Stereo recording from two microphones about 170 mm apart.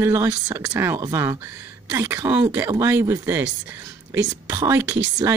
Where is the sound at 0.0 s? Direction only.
15° right (ahead or behind).